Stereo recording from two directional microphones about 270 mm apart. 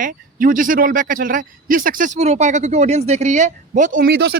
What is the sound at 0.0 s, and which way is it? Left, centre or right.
A man's voice, right.